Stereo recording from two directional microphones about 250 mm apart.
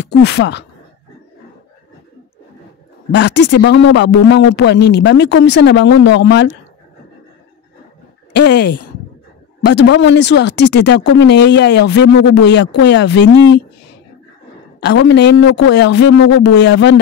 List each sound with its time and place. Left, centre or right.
0.0 s speech: left
3.1 s speech: left
8.3 s speech: left
14.9 s speech: left